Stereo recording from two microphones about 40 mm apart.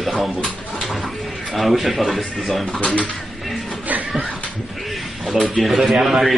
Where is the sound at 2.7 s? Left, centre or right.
Left.